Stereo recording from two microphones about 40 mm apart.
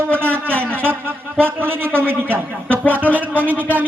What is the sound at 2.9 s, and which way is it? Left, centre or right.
Speech, right.